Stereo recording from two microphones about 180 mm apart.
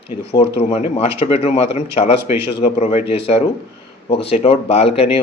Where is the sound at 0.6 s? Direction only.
35° left (ahead or behind).